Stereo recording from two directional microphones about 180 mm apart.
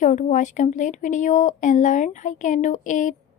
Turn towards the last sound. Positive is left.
turn(degrees=45)  # may be behind; listen again after turning